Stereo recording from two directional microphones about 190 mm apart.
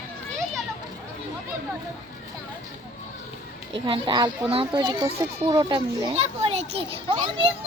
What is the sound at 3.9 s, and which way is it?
A child's voice, 25° right (ahead or behind).